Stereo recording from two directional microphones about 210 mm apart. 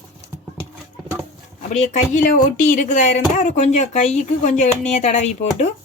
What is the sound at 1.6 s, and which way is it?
Speech, 35° left (ahead or behind).